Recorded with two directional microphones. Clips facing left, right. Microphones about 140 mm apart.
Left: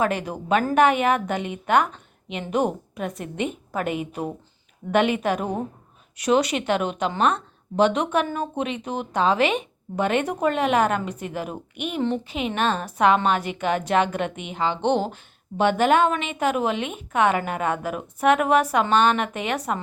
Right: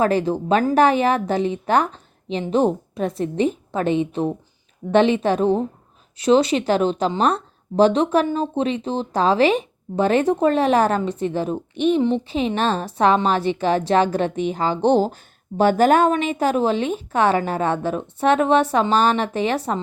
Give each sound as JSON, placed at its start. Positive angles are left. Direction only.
{"t": 0.0, "sound": "a woman's voice", "side_deg": -30}